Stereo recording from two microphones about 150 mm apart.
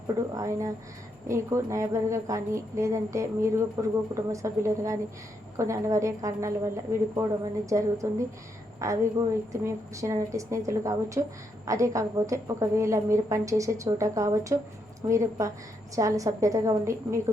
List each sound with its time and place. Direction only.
0.1 s speech: 20° right (ahead or behind)